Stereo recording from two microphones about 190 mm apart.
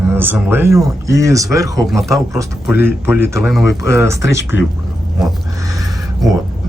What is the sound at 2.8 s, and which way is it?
A man's voice, 10° right (ahead or behind).